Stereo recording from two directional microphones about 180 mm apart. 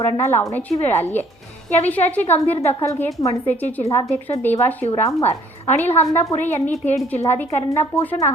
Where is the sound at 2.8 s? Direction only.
15° left (ahead or behind).